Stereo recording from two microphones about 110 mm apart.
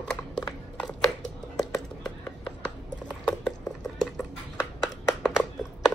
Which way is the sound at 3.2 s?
5° left (ahead or behind).